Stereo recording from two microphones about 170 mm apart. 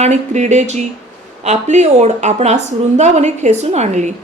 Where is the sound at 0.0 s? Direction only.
45° right (ahead or behind).